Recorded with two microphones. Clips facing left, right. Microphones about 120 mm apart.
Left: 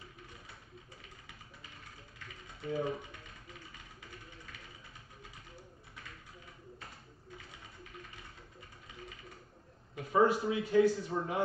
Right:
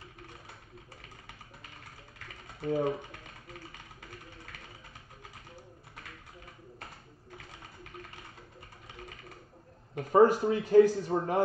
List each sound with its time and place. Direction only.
2.6 s a man's voice: 50° right (ahead or behind)
3.0 s a sound: 60° right (ahead or behind)
9.9 s a man's voice: 45° right (ahead or behind)